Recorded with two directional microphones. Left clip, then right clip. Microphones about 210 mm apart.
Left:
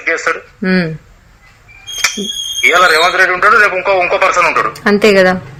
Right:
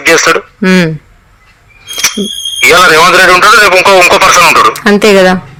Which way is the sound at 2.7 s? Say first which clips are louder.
Right 6 dB; 50° right (ahead or behind).